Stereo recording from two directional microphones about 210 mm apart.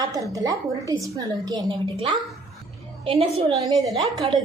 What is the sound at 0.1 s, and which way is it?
A woman's voice, 15° right (ahead or behind).